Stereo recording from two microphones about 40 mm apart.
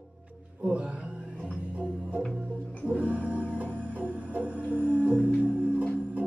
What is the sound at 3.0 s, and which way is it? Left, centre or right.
Music, right.